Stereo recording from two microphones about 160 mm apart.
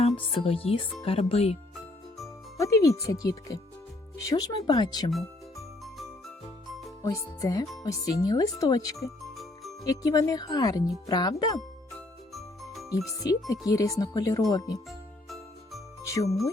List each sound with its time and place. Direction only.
0.2 s speech: 35° left (ahead or behind)
2.6 s speech: 20° left (ahead or behind)
5.1 s music: centre (ahead or behind)
7.0 s speech: 20° left (ahead or behind)
12.3 s music: centre (ahead or behind)
13.1 s speech: 20° left (ahead or behind)
14.8 s jingle: centre (ahead or behind)
16.0 s speech: 20° left (ahead or behind)